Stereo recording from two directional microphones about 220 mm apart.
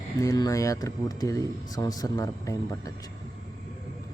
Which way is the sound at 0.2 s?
15° left (ahead or behind).